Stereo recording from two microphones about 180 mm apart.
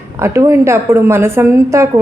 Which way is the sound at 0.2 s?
15° right (ahead or behind).